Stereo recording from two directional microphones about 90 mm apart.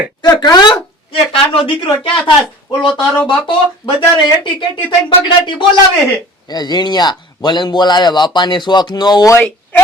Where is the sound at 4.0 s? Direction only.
65° left (ahead or behind).